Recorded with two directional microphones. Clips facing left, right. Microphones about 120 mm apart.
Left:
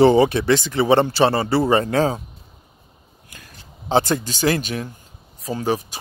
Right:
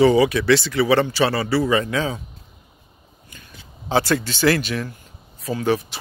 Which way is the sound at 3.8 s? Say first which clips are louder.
Left 1 dB; 20° left (ahead or behind).